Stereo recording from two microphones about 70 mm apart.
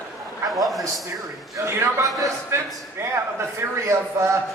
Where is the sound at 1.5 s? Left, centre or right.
Right.